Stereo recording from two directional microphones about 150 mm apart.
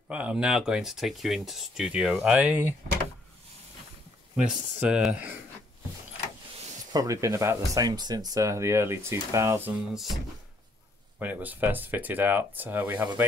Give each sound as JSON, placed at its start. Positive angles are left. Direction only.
{"t": 0.1, "sound": "speech", "side_deg": -5}
{"t": 4.4, "sound": "speech", "side_deg": -5}
{"t": 6.9, "sound": "speech", "side_deg": -25}
{"t": 11.1, "sound": "speech", "side_deg": -10}